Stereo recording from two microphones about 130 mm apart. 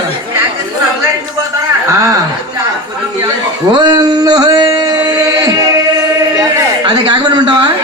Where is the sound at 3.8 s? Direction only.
30° right (ahead or behind).